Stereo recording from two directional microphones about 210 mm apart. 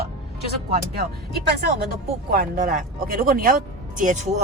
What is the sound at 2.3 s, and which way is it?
Speech, 40° right (ahead or behind).